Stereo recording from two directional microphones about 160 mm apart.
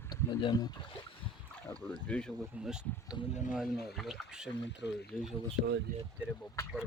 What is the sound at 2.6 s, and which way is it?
Speech, 5° right (ahead or behind).